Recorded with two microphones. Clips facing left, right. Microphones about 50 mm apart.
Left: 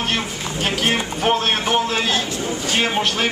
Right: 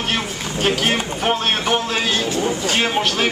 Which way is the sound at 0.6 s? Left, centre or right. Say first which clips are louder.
Right 2 dB; centre.